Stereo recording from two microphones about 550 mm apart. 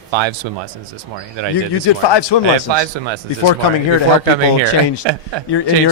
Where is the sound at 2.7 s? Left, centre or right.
Right.